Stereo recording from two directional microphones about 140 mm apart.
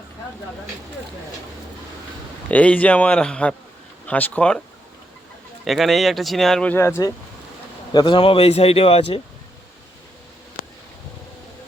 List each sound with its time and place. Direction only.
2.5 s speech: 10° left (ahead or behind)
5.6 s speech: centre (ahead or behind); by 7.1 s 20° left (ahead or behind)
7.9 s speech: 35° left (ahead or behind)
10.6 s a sound: 75° left (ahead or behind)